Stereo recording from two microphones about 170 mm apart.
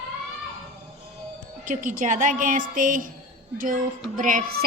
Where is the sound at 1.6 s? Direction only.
50° right (ahead or behind).